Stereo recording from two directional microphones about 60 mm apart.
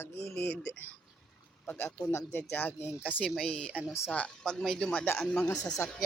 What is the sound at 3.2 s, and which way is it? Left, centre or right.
A woman's voice, centre.